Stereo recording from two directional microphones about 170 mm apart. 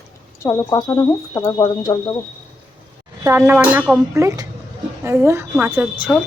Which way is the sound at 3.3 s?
10° right (ahead or behind).